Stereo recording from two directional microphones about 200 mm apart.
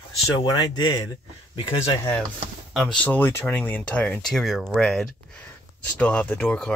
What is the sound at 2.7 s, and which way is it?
Speech, 5° left (ahead or behind).